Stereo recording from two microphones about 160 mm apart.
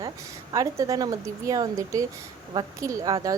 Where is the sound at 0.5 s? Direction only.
20° right (ahead or behind).